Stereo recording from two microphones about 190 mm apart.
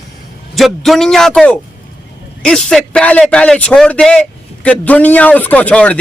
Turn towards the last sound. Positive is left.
turn(degrees=5)  # may be behind; listen again after turning